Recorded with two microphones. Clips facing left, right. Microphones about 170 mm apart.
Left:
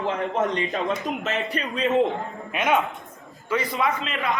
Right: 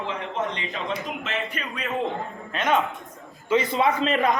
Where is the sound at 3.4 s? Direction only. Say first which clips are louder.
Right 3 dB; 25° right (ahead or behind).